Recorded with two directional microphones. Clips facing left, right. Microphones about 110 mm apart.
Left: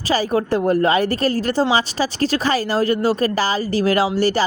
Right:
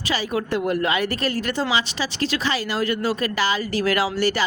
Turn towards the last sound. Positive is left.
turn(degrees=35)  # may be behind; listen again after turning